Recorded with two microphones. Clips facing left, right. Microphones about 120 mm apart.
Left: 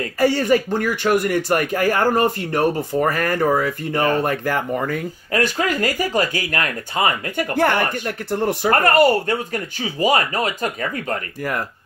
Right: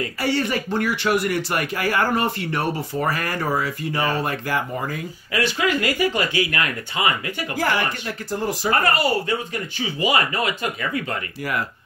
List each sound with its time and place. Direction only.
0.0 s speech: 45° left (ahead or behind); by 5.0 s 60° left (ahead or behind)
5.3 s speech: 45° left (ahead or behind)
7.5 s speech: 55° left (ahead or behind)